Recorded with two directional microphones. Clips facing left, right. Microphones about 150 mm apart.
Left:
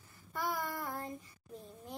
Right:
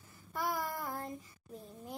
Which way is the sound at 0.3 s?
Centre (ahead or behind).